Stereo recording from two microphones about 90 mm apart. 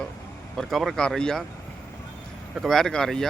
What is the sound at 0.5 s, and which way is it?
Speech, centre (ahead or behind).